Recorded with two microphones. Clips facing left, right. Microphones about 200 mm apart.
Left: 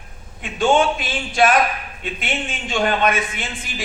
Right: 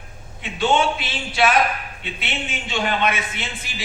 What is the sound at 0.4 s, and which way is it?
A man's voice, 50° left (ahead or behind).